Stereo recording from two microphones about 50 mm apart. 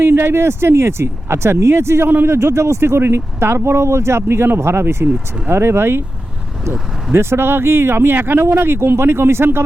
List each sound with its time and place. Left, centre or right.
0.0 s speech: right
8.4 s speech: right